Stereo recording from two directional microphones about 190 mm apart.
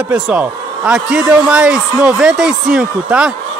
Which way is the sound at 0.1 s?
5° right (ahead or behind).